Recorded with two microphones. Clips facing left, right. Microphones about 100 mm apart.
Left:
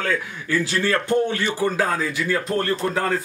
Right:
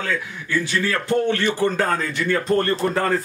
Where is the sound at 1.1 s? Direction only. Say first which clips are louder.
Right 1 dB; 15° left (ahead or behind).